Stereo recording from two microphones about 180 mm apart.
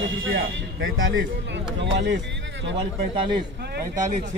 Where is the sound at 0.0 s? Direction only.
90° right.